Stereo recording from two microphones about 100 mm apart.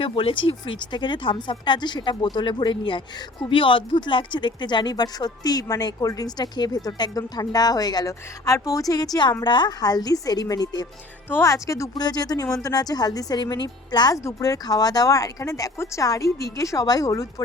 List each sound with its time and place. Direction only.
0.0 s speech: 65° left (ahead or behind); by 9.0 s 40° left (ahead or behind)
9.4 s speech: 50° left (ahead or behind)
11.3 s speech: 25° left (ahead or behind)
11.9 s speech: 45° left (ahead or behind)
14.3 s speech: 35° left (ahead or behind)